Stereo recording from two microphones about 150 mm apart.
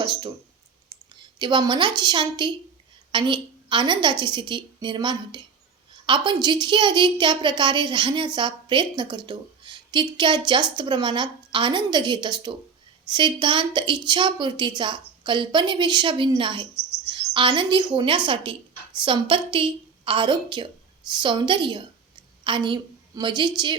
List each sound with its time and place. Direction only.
0.0 s speech: 30° right (ahead or behind)
1.4 s a woman's voice: 30° right (ahead or behind)